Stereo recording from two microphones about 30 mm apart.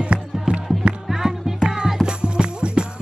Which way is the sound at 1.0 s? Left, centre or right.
Centre.